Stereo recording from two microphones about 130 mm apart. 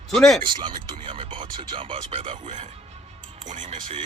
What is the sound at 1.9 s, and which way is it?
Speech, 55° right (ahead or behind).